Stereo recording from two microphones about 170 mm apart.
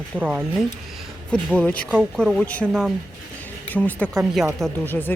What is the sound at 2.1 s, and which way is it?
A woman's voice, 5° left (ahead or behind).